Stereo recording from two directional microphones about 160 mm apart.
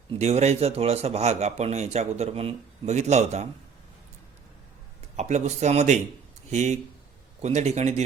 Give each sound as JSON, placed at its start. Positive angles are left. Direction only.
{"t": 0.1, "sound": "a man's voice", "side_deg": -40}
{"t": 5.1, "sound": "a man's voice", "side_deg": -45}